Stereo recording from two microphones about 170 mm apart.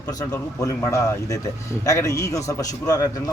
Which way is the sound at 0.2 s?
20° left (ahead or behind).